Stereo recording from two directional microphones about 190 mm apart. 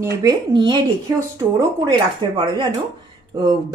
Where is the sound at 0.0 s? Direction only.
20° right (ahead or behind).